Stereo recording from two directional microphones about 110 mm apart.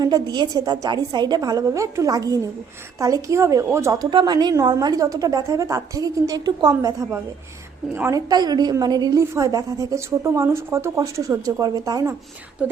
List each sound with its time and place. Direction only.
0.0 s a woman's voice: 40° right (ahead or behind)
4.1 s a woman's voice: 40° right (ahead or behind)